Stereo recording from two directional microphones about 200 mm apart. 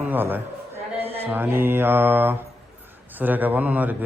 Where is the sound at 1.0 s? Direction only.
30° right (ahead or behind).